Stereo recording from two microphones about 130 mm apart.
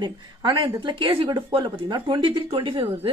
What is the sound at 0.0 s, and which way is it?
Speech, 40° right (ahead or behind).